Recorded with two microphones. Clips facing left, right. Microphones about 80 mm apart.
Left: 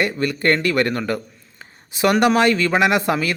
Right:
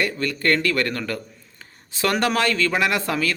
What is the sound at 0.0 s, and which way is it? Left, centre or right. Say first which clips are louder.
A man's voice: left 3 dB; left.